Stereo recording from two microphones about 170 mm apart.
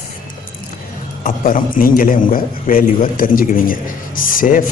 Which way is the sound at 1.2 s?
55° left (ahead or behind).